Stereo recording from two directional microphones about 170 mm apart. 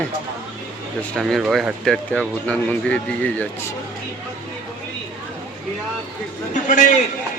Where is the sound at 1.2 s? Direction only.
Centre (ahead or behind).